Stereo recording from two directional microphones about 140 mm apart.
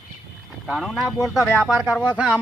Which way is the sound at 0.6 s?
5° right (ahead or behind).